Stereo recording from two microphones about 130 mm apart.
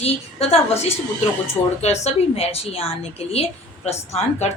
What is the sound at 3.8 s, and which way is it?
Speech, 55° left (ahead or behind).